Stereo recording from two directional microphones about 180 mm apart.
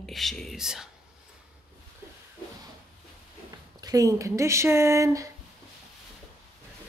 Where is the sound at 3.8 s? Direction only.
20° right (ahead or behind).